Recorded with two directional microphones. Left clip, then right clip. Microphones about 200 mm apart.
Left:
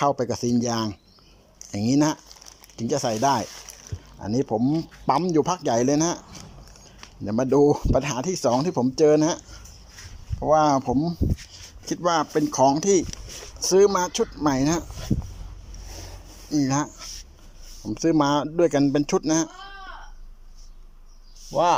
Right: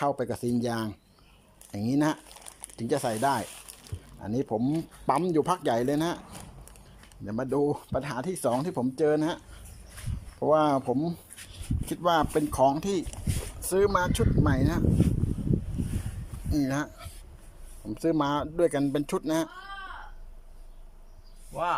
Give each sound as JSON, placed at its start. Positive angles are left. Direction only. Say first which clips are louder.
{"t": 0.0, "sound": "speech", "louder": "left 6 dB", "side_deg": 5}
{"t": 7.3, "sound": "speech", "louder": "left 9 dB", "side_deg": 10}
{"t": 10.4, "sound": "speech", "louder": "left 4 dB", "side_deg": 0}
{"t": 16.5, "sound": "speech", "louder": "left 5 dB", "side_deg": 5}
{"t": 21.5, "sound": "speech", "louder": "left 9 dB", "side_deg": 30}